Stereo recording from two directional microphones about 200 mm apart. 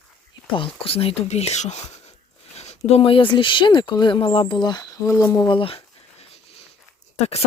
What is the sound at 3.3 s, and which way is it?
Speech, 25° left (ahead or behind).